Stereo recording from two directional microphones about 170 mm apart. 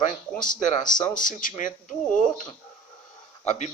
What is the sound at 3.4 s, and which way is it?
Speech, 40° left (ahead or behind).